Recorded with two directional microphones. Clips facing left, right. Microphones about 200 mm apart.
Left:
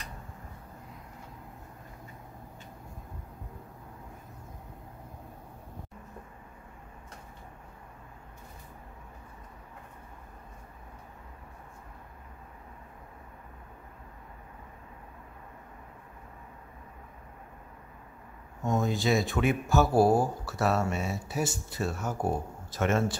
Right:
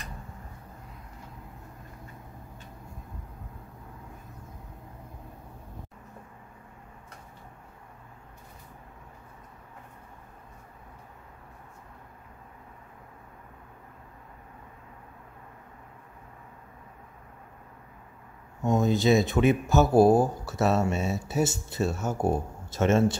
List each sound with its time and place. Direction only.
18.7 s speech: 20° right (ahead or behind)